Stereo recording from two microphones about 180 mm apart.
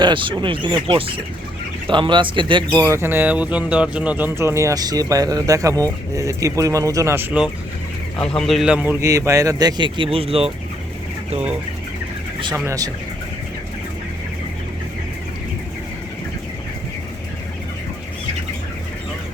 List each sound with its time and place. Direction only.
0.0 s speech: 25° right (ahead or behind); by 7.5 s 10° right (ahead or behind)
8.2 s speech: 5° left (ahead or behind); by 10.5 s 30° right (ahead or behind)
12.5 s speech: 15° right (ahead or behind)